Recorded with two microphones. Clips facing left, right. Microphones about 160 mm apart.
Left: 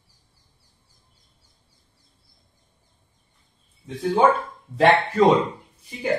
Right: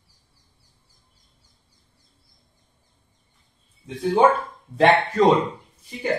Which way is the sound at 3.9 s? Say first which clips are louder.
Right 1 dB; centre (ahead or behind).